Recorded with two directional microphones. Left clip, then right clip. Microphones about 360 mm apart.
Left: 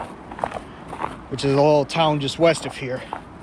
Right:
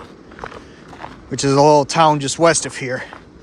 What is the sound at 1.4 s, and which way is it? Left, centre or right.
Speech, centre.